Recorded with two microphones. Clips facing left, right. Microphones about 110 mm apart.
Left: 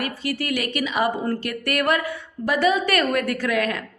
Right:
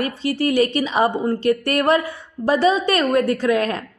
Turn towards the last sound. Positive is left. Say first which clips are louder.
# right 4 dB
turn(degrees=-30)  # may be behind; listen again after turning